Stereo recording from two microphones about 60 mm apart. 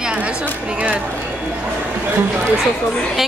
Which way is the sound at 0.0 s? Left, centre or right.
Centre.